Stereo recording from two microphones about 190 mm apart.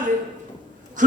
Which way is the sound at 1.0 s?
45° right (ahead or behind).